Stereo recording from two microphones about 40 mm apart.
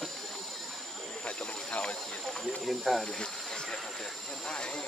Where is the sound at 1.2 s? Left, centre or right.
Left.